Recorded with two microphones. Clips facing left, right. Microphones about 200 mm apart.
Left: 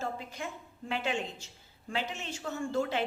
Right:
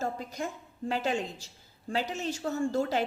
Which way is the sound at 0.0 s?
40° right (ahead or behind).